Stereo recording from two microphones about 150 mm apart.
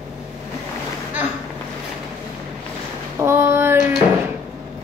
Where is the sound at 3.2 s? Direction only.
15° right (ahead or behind).